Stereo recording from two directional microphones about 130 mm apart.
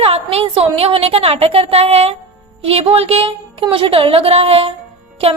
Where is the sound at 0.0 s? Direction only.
50° right (ahead or behind).